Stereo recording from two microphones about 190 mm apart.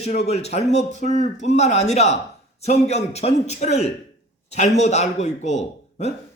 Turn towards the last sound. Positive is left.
turn(degrees=35)  # may be behind; listen again after turning